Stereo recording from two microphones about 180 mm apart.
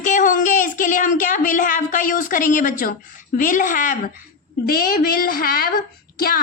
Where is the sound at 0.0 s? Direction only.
45° left (ahead or behind).